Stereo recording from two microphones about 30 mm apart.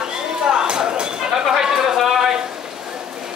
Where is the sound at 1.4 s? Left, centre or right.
Centre.